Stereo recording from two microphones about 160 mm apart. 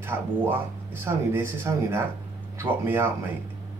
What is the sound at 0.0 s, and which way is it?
Speech, 15° right (ahead or behind).